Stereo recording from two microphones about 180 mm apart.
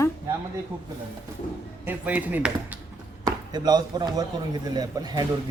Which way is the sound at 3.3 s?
20° right (ahead or behind).